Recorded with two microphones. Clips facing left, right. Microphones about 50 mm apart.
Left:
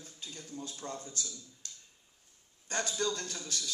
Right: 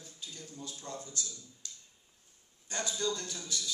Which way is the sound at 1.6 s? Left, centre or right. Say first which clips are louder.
Right 2 dB; left.